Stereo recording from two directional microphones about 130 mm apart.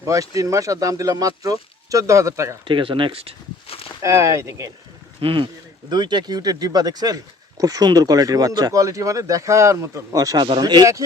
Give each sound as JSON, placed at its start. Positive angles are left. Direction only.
{"t": 0.0, "sound": "speech", "side_deg": -25}
{"t": 2.6, "sound": "speech", "side_deg": -40}
{"t": 4.0, "sound": "speech", "side_deg": -25}
{"t": 5.2, "sound": "speech", "side_deg": -40}